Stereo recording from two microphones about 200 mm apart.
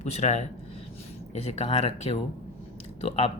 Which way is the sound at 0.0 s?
35° left (ahead or behind).